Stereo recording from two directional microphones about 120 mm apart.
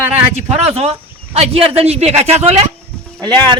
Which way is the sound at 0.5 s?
60° right (ahead or behind).